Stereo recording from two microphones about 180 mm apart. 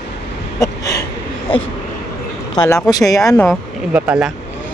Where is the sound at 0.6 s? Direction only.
20° left (ahead or behind).